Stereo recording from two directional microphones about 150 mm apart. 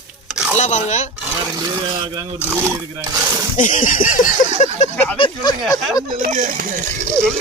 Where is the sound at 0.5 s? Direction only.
50° left (ahead or behind).